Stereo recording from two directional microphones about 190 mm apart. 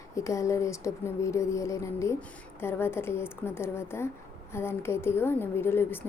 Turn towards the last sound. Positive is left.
turn(degrees=10)  # may be behind; listen again after turning